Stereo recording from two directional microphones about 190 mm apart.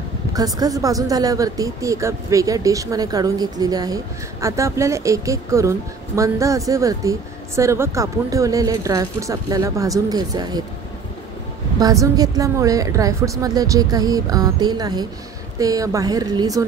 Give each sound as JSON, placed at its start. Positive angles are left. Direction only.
{"t": 0.3, "sound": "a woman's voice", "side_deg": -20}
{"t": 11.8, "sound": "a woman's voice", "side_deg": -20}